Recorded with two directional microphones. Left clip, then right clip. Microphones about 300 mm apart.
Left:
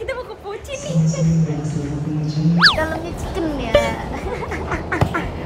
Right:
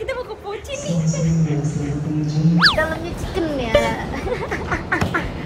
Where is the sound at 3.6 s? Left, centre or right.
Centre.